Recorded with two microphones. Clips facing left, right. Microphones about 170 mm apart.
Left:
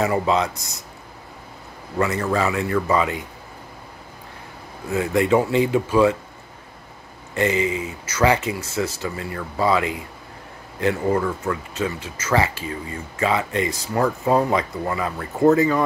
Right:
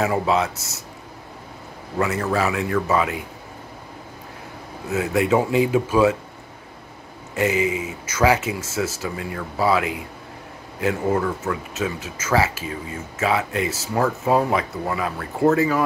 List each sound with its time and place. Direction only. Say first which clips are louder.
0.0 s speech: even; 5° right (ahead or behind)
2.0 s speech: even; 5° right (ahead or behind)
4.8 s speech: left 1 dB; 5° right (ahead or behind)
7.3 s speech: even; 10° right (ahead or behind)